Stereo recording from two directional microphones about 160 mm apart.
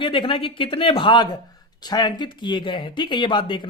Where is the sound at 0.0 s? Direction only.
30° left (ahead or behind).